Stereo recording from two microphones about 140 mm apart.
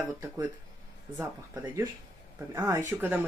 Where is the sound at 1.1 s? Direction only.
20° right (ahead or behind).